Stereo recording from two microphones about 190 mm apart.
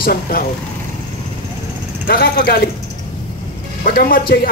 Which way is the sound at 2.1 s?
55° left (ahead or behind).